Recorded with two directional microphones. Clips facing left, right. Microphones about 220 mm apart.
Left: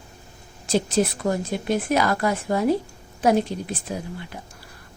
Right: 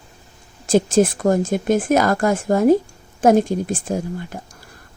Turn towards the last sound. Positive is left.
turn(degrees=-45)  # may be behind; listen again after turning